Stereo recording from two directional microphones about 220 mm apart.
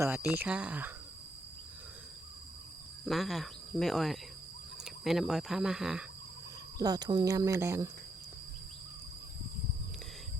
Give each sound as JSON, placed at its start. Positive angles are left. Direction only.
{"t": 0.3, "sound": "speech", "side_deg": -5}
{"t": 3.1, "sound": "speech", "side_deg": 0}
{"t": 6.7, "sound": "speech", "side_deg": -20}